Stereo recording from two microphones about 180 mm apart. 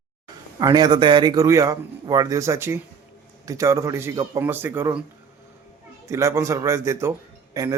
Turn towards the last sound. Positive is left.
turn(degrees=-20)  # may be behind; listen again after turning